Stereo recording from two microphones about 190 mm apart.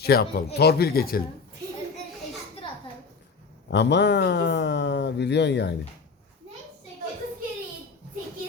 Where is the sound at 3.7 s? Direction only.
65° left (ahead or behind).